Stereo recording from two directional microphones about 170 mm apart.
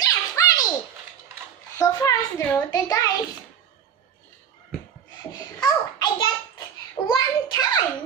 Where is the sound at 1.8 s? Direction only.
20° left (ahead or behind).